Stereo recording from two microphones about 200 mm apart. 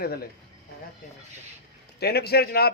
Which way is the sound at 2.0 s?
55° left (ahead or behind).